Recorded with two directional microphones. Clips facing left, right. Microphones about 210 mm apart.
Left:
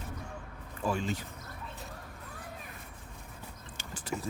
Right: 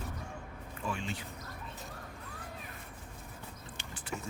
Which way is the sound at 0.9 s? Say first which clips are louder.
Left 6 dB; 40° left (ahead or behind).